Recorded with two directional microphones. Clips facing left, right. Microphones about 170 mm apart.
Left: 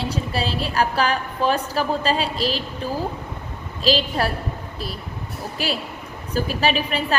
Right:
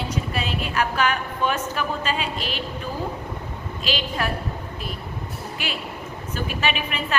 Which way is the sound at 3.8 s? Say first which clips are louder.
Left 6 dB; 35° left (ahead or behind).